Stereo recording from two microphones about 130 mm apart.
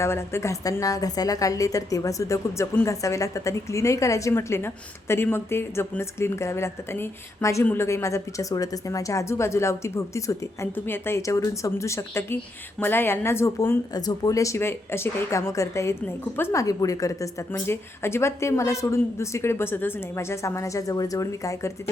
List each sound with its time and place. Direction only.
0.0 s a woman's voice: 20° left (ahead or behind)